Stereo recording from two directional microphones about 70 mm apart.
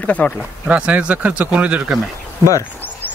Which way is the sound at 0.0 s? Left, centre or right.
Left.